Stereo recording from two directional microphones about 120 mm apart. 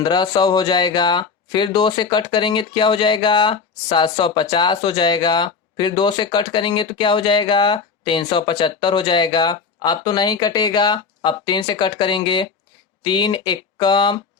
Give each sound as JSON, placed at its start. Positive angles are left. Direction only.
{"t": 0.0, "sound": "speech", "side_deg": 35}